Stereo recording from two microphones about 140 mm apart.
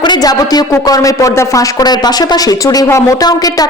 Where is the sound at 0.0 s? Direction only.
30° left (ahead or behind).